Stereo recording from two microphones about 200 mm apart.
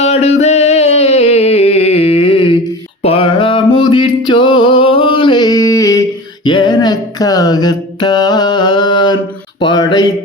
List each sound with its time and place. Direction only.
0.0 s music: 35° left (ahead or behind)
3.0 s mantra: 30° left (ahead or behind)
3.8 s a sound: 25° left (ahead or behind)